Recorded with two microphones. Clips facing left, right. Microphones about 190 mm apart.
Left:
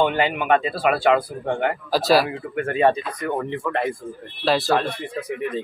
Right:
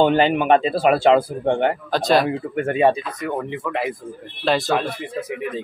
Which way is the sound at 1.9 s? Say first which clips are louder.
Left 2 dB; 5° left (ahead or behind).